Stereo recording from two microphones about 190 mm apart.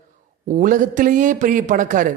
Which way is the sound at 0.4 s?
45° right (ahead or behind).